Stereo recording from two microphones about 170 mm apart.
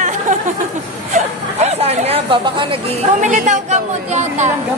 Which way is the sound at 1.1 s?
40° right (ahead or behind).